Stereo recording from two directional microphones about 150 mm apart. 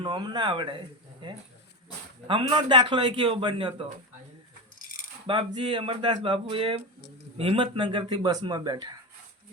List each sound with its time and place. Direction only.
0.0 s a man's voice: 30° right (ahead or behind)
2.2 s a man's voice: 35° right (ahead or behind)
5.2 s a man's voice: 35° right (ahead or behind)